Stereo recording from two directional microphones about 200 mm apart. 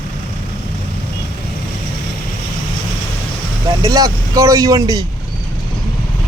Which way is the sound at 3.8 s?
15° right (ahead or behind).